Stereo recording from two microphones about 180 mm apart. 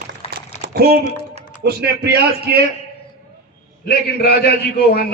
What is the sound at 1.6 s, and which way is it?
A man's voice, 65° right (ahead or behind).